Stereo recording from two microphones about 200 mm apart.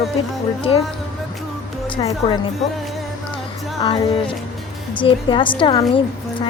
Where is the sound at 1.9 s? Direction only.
25° left (ahead or behind).